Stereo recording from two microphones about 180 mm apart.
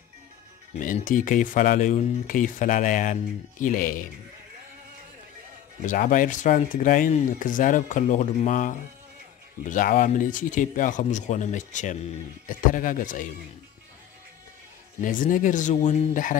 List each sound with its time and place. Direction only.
0.7 s speech: 45° left (ahead or behind)
5.9 s speech: 50° left (ahead or behind)
15.0 s speech: 50° left (ahead or behind)